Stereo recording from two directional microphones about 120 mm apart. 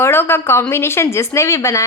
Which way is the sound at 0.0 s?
20° left (ahead or behind).